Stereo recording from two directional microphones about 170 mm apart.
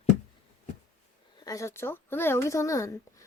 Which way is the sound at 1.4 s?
20° left (ahead or behind).